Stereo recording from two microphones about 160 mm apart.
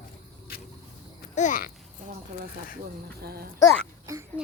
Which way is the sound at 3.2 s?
80° right.